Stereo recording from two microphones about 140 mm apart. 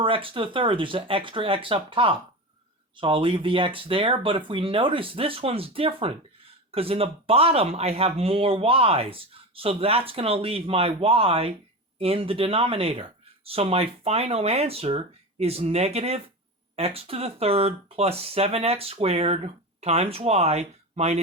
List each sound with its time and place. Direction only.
0.0 s speech: 40° right (ahead or behind)